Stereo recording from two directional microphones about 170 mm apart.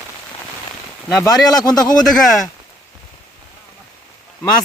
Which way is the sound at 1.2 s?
25° left (ahead or behind).